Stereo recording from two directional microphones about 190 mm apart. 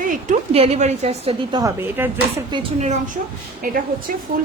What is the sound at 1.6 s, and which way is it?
Speech, 15° right (ahead or behind).